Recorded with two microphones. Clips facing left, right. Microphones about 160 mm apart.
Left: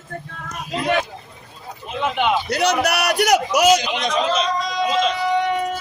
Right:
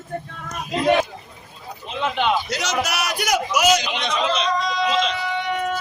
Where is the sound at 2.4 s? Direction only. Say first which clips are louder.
Left 5 dB; 60° left (ahead or behind).